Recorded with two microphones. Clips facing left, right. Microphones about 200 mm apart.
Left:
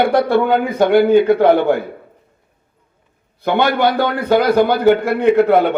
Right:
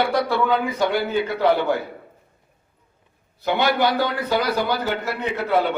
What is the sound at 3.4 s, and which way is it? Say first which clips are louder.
A man's voice: left 5 dB; 55° left (ahead or behind).